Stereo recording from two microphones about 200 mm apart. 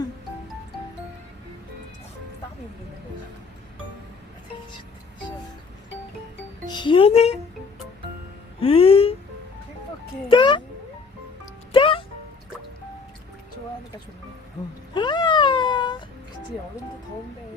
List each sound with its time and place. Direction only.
6.7 s speech: 25° left (ahead or behind)
8.6 s music: 30° left (ahead or behind)
10.2 s music: 25° left (ahead or behind)
11.7 s music: 25° left (ahead or behind)
14.9 s a sound: 25° left (ahead or behind)